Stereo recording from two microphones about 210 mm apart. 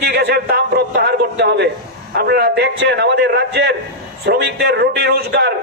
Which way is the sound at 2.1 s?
50° right (ahead or behind).